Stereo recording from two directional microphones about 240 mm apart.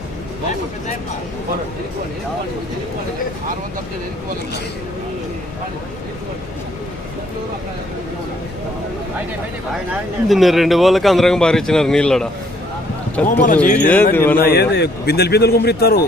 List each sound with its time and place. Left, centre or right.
9.9 s speech: centre
14.3 s a man's voice: left